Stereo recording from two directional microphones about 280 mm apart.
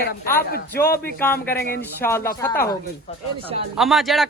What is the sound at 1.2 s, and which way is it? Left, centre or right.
Speech, centre.